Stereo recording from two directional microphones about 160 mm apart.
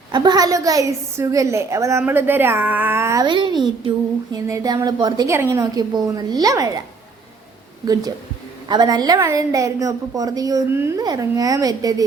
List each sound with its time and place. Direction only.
0.1 s a woman's voice: 25° right (ahead or behind)
8.6 s a woman's voice: 25° right (ahead or behind)